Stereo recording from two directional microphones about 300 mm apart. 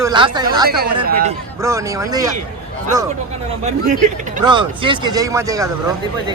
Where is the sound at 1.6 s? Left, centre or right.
Centre.